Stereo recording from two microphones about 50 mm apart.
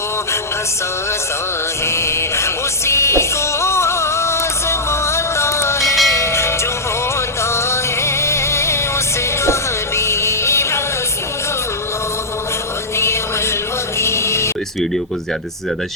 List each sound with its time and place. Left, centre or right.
1.9 s music: left
6.1 s train: left
7.4 s music: left
13.0 s music: left